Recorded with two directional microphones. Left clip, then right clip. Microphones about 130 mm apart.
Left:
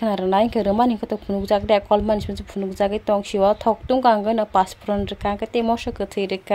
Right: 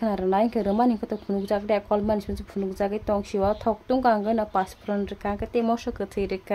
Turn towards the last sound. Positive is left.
turn(degrees=20)  # may be behind; listen again after turning